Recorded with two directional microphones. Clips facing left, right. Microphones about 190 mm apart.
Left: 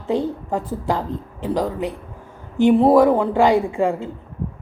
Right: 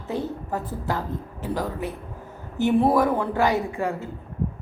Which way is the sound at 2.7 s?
20° left (ahead or behind).